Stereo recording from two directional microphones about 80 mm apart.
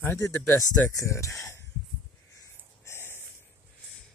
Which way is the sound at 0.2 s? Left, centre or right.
Left.